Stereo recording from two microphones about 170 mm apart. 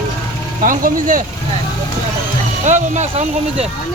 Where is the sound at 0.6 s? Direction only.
50° right (ahead or behind).